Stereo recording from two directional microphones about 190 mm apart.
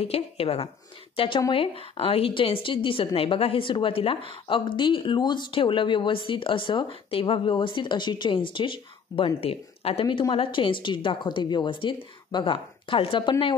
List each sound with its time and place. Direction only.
0.0 s a woman's voice: 30° left (ahead or behind)